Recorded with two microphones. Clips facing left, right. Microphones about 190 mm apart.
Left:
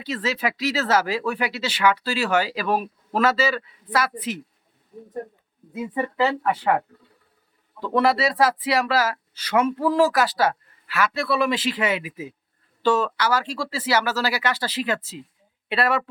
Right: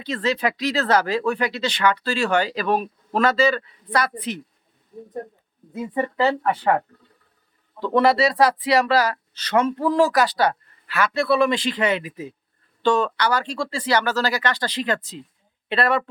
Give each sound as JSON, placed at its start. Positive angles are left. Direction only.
{"t": 0.0, "sound": "speech", "side_deg": 5}
{"t": 5.7, "sound": "speech", "side_deg": 5}
{"t": 7.9, "sound": "speech", "side_deg": 0}